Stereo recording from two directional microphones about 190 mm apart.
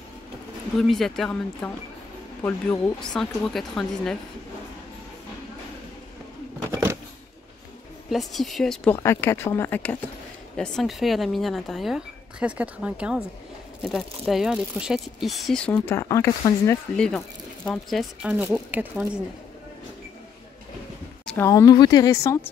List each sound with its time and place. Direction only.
0.7 s speech: centre (ahead or behind)
6.7 s a sound: 15° right (ahead or behind)
8.1 s speech: centre (ahead or behind)
21.5 s a woman's voice: 20° left (ahead or behind)